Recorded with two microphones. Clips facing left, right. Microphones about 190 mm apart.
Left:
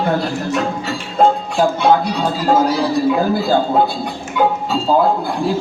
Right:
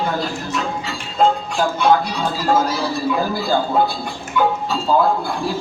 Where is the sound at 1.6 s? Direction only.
20° left (ahead or behind).